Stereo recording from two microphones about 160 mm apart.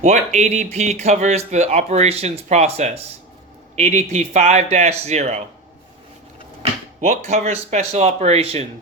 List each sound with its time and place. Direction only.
0.0 s speech: 45° right (ahead or behind)
7.0 s speech: 45° right (ahead or behind)